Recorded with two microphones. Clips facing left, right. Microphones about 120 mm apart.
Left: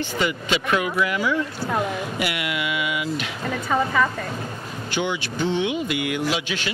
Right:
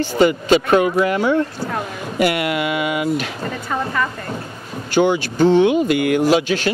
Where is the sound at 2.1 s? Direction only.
45° right (ahead or behind).